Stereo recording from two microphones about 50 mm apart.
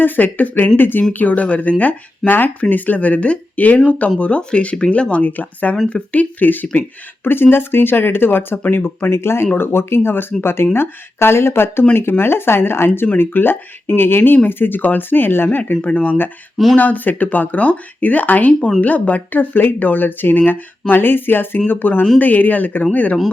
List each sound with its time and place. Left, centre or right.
0.0 s speech: left
9.0 s speech: left
15.5 s speech: left